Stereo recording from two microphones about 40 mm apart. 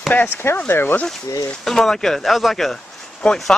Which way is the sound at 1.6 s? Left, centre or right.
Centre.